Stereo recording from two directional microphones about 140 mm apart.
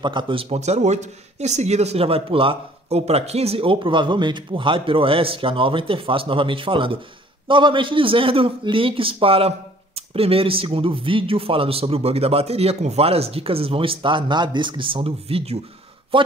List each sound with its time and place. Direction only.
0.0 s speech: 35° right (ahead or behind)